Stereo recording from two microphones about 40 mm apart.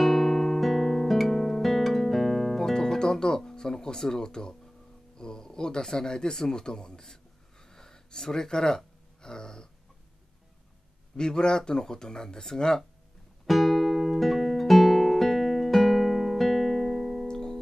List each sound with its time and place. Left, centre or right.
0.0 s guitar: centre
2.6 s guitar: centre
5.1 s speech: centre
7.6 s gasp: centre
11.1 s speech: centre
13.5 s music: centre
17.3 s music: centre